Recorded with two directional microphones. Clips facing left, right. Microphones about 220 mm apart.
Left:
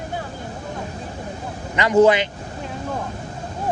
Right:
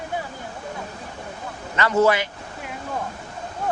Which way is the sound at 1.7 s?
15° left (ahead or behind).